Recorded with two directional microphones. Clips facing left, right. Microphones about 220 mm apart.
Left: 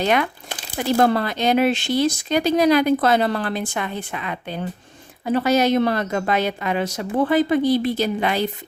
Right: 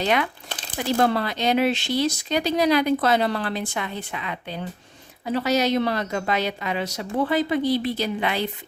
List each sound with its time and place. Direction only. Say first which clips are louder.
0.0 s speech: left 3 dB; 50° left (ahead or behind)
0.4 s crumpling: left 2 dB; 10° left (ahead or behind)
0.9 s speech: left 3 dB; 45° left (ahead or behind)